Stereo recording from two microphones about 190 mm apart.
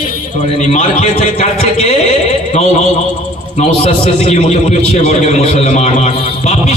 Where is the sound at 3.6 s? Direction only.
35° left (ahead or behind).